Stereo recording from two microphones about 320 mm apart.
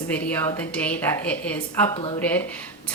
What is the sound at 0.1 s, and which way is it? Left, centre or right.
Speech, centre.